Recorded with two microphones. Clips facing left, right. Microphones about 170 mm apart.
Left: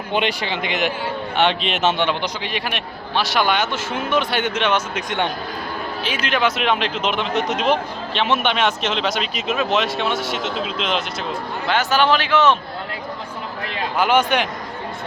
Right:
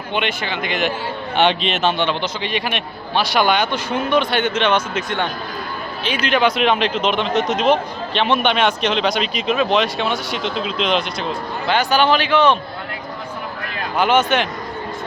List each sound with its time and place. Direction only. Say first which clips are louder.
0.1 s speech: left 1 dB; 35° left (ahead or behind); by 0.9 s 20° left (ahead or behind)
1.4 s speech: right 2 dB; centre (ahead or behind)
1.7 s a man's voice: even; 15° left (ahead or behind)
6.0 s speech: right 4 dB; 5° left (ahead or behind)
14.0 s a man's voice: right 1 dB; 10° left (ahead or behind)